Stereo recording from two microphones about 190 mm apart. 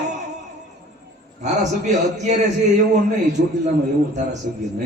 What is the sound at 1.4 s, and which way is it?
Speech, 40° right (ahead or behind).